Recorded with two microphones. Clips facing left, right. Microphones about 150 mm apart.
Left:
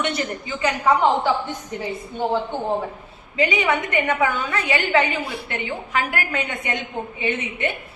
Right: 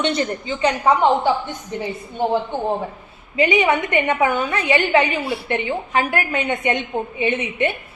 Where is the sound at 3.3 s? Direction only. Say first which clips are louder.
Right 4 dB; 20° right (ahead or behind).